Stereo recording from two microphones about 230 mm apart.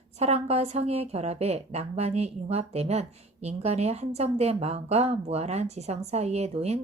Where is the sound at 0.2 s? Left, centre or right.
Right.